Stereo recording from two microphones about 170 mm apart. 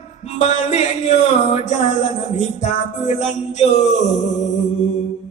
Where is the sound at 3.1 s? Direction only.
45° left (ahead or behind).